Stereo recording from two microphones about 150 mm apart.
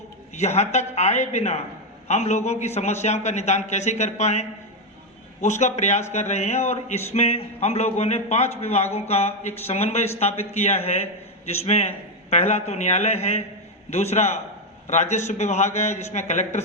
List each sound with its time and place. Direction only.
0.3 s a man's voice: 50° left (ahead or behind)